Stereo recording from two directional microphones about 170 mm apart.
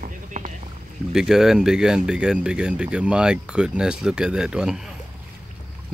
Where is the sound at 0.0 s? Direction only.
50° right (ahead or behind).